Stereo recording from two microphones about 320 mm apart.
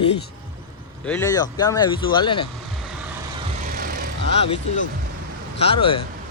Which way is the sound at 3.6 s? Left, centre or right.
Right.